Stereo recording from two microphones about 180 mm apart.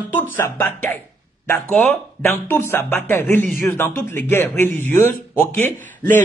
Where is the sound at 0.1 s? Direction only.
10° left (ahead or behind).